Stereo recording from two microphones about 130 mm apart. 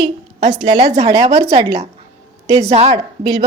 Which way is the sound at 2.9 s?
30° right (ahead or behind).